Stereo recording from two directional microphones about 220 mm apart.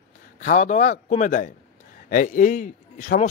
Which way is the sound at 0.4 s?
35° left (ahead or behind).